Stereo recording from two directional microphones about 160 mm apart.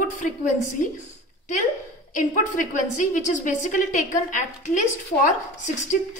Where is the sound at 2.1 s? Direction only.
50° left (ahead or behind).